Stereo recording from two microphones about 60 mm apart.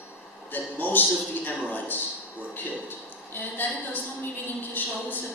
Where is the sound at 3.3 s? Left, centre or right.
Left.